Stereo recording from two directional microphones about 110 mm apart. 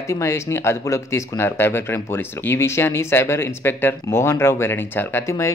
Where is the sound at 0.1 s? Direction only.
25° left (ahead or behind).